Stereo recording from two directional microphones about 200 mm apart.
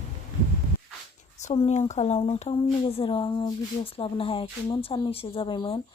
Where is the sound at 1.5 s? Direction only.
30° left (ahead or behind).